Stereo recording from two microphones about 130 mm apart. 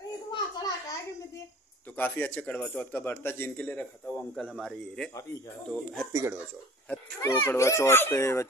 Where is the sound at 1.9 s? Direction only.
15° left (ahead or behind).